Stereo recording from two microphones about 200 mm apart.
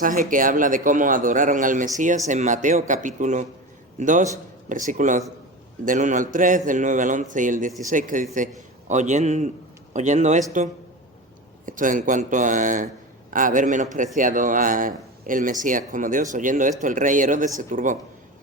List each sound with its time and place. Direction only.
0.0 s a man's voice: 40° right (ahead or behind)
11.6 s speech: 40° right (ahead or behind)